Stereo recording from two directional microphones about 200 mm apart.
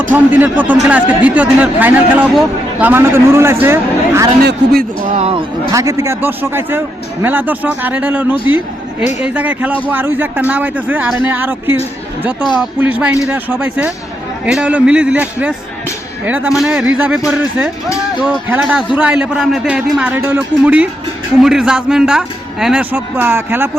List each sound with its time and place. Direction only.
0.1 s speech: 10° right (ahead or behind)
4.4 s a man's voice: 50° right (ahead or behind)
5.1 s speech: 30° right (ahead or behind)
5.7 s a man's voice: 15° right (ahead or behind)